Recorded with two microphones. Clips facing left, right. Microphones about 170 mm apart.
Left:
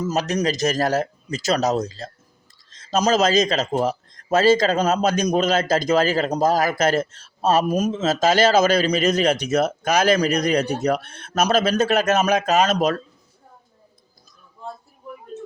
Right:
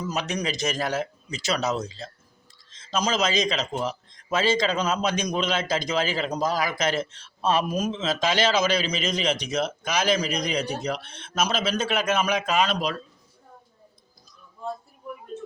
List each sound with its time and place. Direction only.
0.0 s a man's voice: 40° left (ahead or behind)